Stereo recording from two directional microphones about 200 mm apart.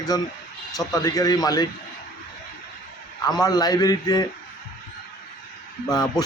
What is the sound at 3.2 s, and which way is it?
Speech, 20° left (ahead or behind).